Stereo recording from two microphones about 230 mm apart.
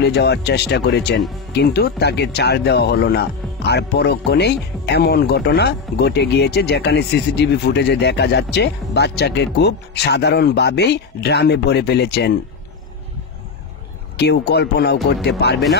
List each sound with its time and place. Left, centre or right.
0.0 s speech: left
14.1 s speech: left